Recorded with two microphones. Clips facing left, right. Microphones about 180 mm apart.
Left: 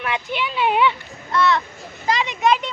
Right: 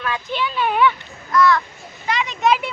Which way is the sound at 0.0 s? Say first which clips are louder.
Right 1 dB; 20° left (ahead or behind).